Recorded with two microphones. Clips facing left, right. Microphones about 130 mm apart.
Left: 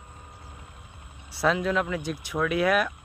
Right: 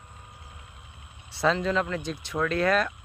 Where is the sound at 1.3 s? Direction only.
5° left (ahead or behind).